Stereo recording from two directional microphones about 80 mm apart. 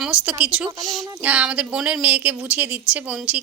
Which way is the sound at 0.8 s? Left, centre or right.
Centre.